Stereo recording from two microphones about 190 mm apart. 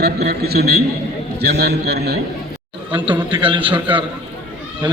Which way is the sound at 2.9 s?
25° right (ahead or behind).